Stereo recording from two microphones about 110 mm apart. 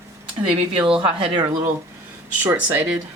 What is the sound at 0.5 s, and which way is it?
Speech, 55° right (ahead or behind).